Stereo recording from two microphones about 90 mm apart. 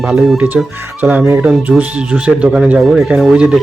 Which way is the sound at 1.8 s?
15° right (ahead or behind).